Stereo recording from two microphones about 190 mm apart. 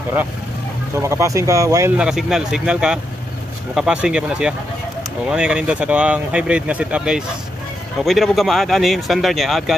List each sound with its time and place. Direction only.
0.9 s speech: 15° right (ahead or behind)
2.0 s speech: 5° right (ahead or behind)